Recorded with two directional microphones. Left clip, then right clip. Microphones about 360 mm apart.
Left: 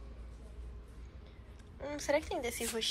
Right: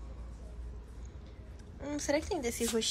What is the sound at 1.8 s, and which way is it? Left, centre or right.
Speech, centre.